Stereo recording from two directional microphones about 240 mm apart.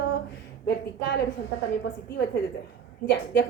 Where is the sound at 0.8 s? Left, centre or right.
Left.